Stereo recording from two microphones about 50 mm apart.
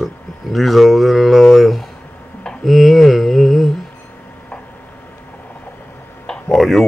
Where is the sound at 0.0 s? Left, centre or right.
Centre.